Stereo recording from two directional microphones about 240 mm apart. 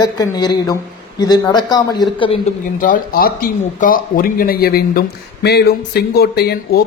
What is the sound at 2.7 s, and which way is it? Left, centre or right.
Speech, left.